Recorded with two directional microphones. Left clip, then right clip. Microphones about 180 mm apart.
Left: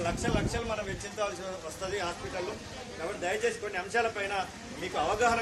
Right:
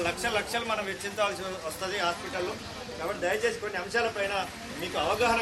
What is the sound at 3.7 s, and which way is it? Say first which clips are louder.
Speech: right 1 dB; 40° left (ahead or behind).